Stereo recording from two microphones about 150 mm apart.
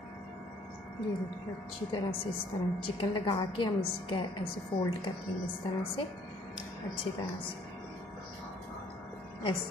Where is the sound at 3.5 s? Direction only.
35° left (ahead or behind).